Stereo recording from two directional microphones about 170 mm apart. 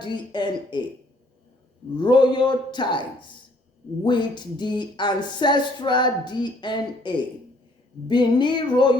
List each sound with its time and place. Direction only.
0.0 s speech: 25° left (ahead or behind)
2.0 s speech: 25° left (ahead or behind)